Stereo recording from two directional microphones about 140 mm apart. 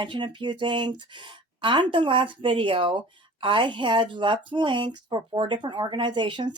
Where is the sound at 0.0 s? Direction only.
35° right (ahead or behind).